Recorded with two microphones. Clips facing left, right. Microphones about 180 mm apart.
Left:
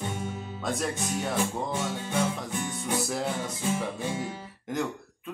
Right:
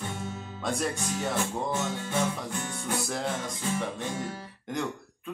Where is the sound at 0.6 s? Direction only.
Centre (ahead or behind).